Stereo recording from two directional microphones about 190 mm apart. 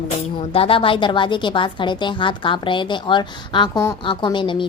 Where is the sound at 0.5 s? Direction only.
30° left (ahead or behind).